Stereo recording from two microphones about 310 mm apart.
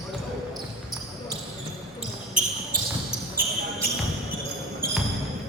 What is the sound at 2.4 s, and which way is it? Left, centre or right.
Basketball bounce, right.